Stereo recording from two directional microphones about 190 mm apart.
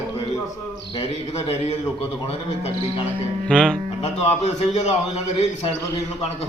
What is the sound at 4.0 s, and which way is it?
A man's voice, 35° left (ahead or behind).